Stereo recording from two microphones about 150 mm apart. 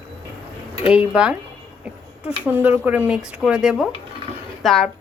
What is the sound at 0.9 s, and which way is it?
Speech, 5° right (ahead or behind).